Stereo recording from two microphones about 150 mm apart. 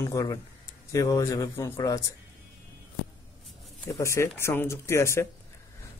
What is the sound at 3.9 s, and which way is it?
Speech, 20° left (ahead or behind).